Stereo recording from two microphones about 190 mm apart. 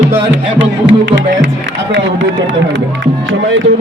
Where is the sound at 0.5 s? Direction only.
70° right (ahead or behind).